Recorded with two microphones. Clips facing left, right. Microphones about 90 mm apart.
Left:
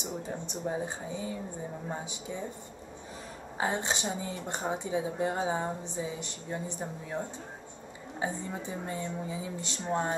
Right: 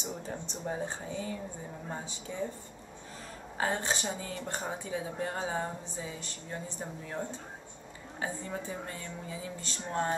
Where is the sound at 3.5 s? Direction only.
20° left (ahead or behind).